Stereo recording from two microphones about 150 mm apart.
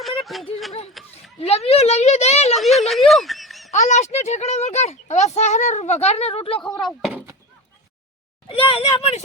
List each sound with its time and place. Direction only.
0.0 s a sound: centre (ahead or behind)
1.4 s speech: 40° left (ahead or behind)
2.6 s speech: centre (ahead or behind)
3.1 s music: centre (ahead or behind)
3.7 s speech: 50° left (ahead or behind)
6.6 s speech: 5° left (ahead or behind)
8.4 s speech: 35° left (ahead or behind)